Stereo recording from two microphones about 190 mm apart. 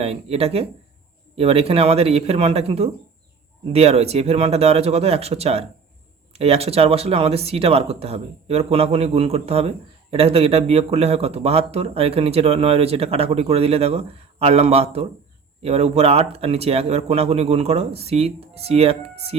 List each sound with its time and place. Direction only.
0.0 s speech: 30° right (ahead or behind)